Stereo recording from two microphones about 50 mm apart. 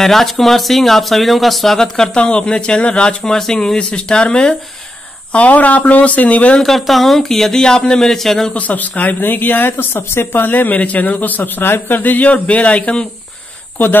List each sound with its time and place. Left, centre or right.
0.0 s speech: centre
3.3 s speech: centre
3.5 s speech: centre
5.3 s speech: left
6.6 s speech: centre
8.5 s speech: left